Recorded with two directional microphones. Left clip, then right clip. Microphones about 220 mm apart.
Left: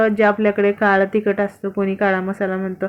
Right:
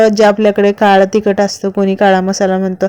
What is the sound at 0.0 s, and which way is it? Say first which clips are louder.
A woman's voice: right 7 dB; 40° right (ahead or behind).